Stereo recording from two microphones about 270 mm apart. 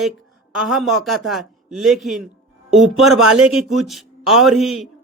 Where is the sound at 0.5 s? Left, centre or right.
Centre.